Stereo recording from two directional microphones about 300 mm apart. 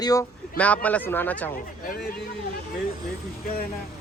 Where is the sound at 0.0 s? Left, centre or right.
Centre.